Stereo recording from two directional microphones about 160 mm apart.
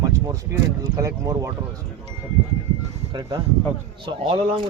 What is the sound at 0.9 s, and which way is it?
Speech, 20° right (ahead or behind).